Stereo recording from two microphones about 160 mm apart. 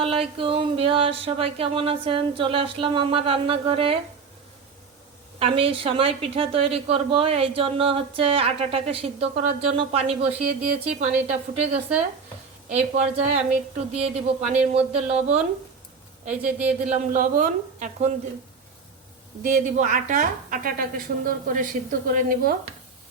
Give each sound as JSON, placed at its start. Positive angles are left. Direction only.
{"t": 0.0, "sound": "a woman's voice", "side_deg": -35}
{"t": 5.4, "sound": "a woman's voice", "side_deg": -35}
{"t": 14.5, "sound": "a woman's voice", "side_deg": -5}
{"t": 14.9, "sound": "speech", "side_deg": -45}
{"t": 16.2, "sound": "a woman's voice", "side_deg": -10}
{"t": 16.9, "sound": "speech", "side_deg": -50}
{"t": 19.4, "sound": "a woman's voice", "side_deg": -55}